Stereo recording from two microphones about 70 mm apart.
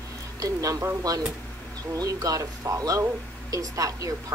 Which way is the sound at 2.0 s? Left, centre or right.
Right.